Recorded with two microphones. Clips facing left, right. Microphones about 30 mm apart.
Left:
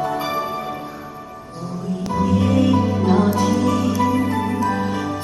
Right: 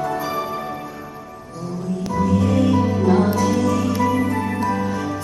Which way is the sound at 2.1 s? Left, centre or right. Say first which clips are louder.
Left 1 dB; left.